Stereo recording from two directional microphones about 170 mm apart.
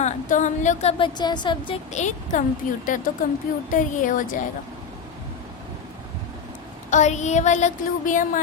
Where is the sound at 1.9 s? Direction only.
45° left (ahead or behind).